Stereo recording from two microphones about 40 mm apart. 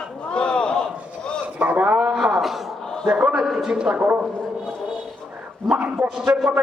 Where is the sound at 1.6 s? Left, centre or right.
Right.